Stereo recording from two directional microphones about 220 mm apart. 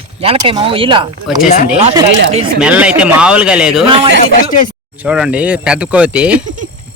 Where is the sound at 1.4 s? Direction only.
35° left (ahead or behind).